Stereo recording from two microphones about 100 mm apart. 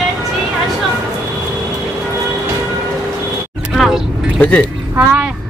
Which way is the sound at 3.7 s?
5° right (ahead or behind).